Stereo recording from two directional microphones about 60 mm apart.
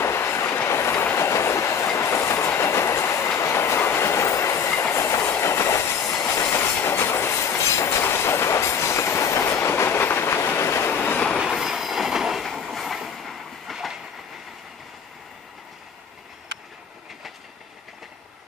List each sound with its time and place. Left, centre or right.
0.0 s train: left
6.2 s train: left
11.0 s train: left
11.4 s train: centre